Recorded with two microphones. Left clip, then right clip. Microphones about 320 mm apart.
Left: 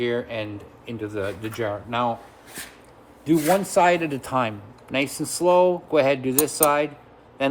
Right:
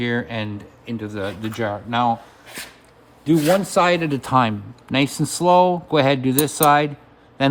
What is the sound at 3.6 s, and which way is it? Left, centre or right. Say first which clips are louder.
Speech: right 1 dB; right.